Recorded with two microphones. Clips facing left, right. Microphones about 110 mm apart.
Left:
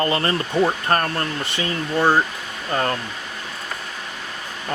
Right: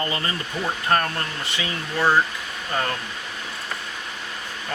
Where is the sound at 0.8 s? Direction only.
40° left (ahead or behind).